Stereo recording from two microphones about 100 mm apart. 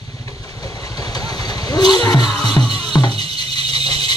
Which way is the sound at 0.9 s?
40° left (ahead or behind).